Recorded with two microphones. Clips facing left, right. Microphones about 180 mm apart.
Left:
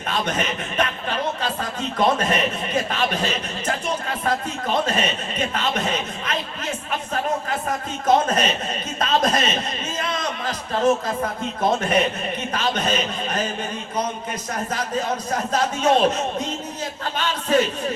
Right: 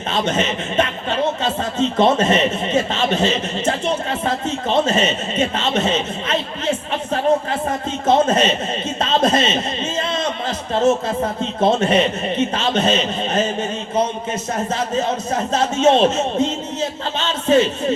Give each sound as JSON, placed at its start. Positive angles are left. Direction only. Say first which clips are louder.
{"t": 0.1, "sound": "speech", "louder": "right 4 dB", "side_deg": -25}